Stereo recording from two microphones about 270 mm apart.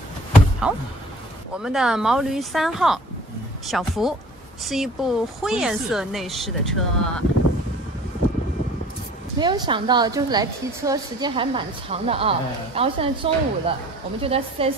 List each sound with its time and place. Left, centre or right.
0.6 s a woman's voice: centre
9.4 s a woman's voice: centre